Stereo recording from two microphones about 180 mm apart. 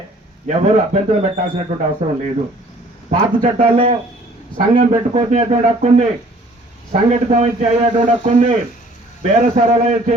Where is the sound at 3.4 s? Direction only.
35° right (ahead or behind).